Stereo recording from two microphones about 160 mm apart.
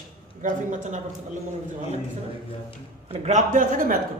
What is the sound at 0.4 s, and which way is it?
Speech, 50° right (ahead or behind).